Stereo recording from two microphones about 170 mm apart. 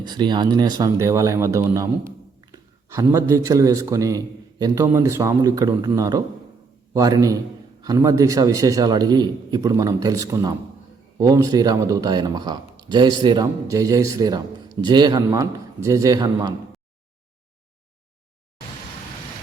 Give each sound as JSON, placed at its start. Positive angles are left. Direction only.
{"t": 0.0, "sound": "speech", "side_deg": -25}